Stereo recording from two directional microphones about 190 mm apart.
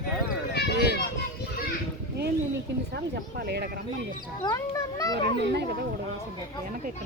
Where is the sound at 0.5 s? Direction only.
60° left (ahead or behind).